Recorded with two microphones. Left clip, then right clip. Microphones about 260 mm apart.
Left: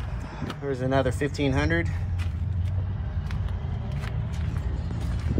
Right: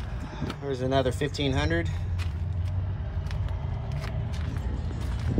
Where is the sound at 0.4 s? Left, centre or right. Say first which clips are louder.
Left 1 dB; centre.